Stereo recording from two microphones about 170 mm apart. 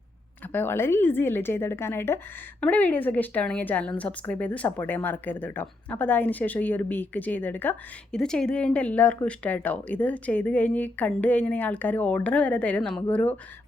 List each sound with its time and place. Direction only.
0.5 s a woman's voice: 15° left (ahead or behind)